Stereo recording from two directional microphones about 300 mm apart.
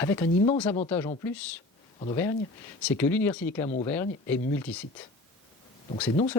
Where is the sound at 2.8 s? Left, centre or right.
Centre.